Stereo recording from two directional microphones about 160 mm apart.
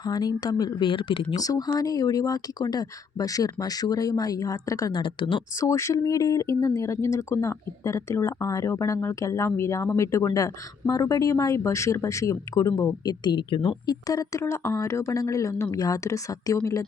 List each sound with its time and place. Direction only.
0.0 s speech: 25° left (ahead or behind)
1.4 s speech: 25° left (ahead or behind)
5.5 s speech: 20° left (ahead or behind)